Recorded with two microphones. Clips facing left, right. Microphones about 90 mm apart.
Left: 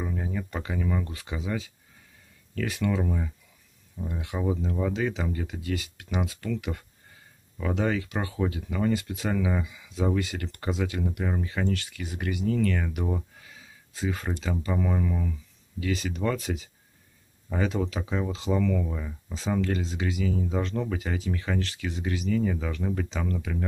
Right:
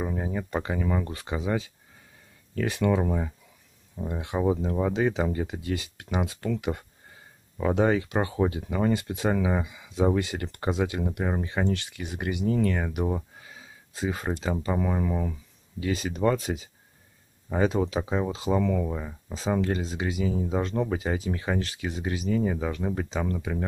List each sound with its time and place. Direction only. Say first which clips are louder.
0.0 s speech: right 2 dB; 30° right (ahead or behind)
2.9 s speech: right 3 dB; 40° right (ahead or behind)
4.0 s speech: right 4 dB; 30° right (ahead or behind)